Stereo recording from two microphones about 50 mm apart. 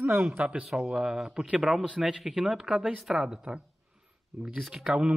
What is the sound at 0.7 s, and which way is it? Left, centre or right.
A man's voice, centre.